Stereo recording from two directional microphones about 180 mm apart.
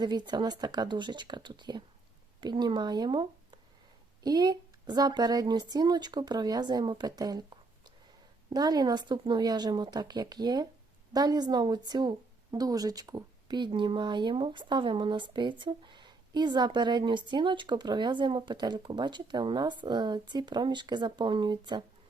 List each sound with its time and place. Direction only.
0.0 s a woman's voice: 25° right (ahead or behind)
8.4 s a woman's voice: 20° right (ahead or behind)